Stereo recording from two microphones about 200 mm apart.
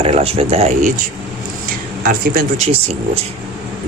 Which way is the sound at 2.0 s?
45° right (ahead or behind).